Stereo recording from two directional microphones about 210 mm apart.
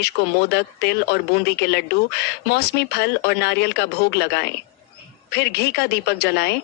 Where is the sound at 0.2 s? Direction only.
50° left (ahead or behind).